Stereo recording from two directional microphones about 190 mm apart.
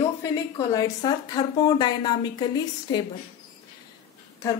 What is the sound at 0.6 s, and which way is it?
A woman's voice, 20° left (ahead or behind).